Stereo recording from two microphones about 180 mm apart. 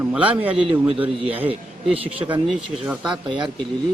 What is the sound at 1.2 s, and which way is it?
Speech, 30° right (ahead or behind).